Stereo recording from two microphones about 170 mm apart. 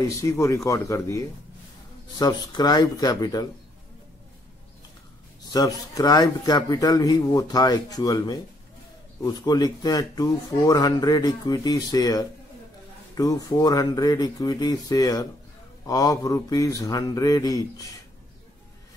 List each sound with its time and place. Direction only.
0.2 s speech: 15° left (ahead or behind)
2.5 s speech: 25° left (ahead or behind)
5.5 s speech: 20° left (ahead or behind)